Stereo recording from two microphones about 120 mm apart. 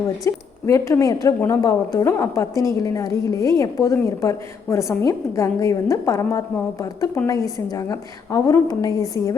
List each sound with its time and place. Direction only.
0.3 s a woman's voice: 25° left (ahead or behind)